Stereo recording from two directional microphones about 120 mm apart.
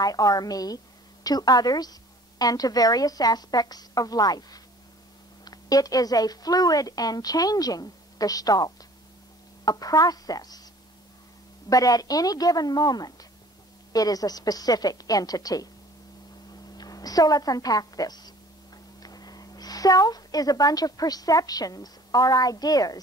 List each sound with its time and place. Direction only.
0.0 s a woman's voice: 30° left (ahead or behind)
11.7 s a woman's voice: 30° left (ahead or behind)